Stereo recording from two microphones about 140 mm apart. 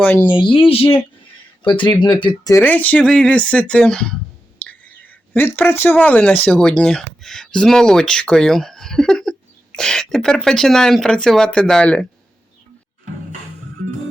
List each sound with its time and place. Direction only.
0.0 s speech: 15° left (ahead or behind)
0.3 s speech: 35° left (ahead or behind)
2.6 s speech: 10° left (ahead or behind)
4.6 s a sound: 10° left (ahead or behind)
5.5 s speech: 15° left (ahead or behind)